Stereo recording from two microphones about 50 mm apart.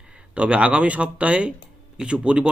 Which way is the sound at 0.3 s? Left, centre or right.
Right.